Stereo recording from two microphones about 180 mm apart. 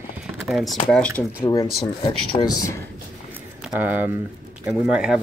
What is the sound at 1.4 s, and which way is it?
Speech, 20° left (ahead or behind).